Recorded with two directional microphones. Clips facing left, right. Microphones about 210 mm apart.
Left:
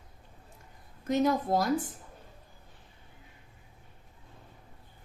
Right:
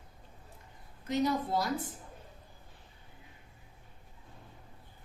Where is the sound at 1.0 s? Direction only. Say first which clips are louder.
Left 4 dB; 50° left (ahead or behind).